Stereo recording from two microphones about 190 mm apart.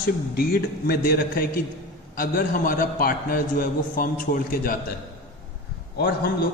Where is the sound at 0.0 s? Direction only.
55° left (ahead or behind).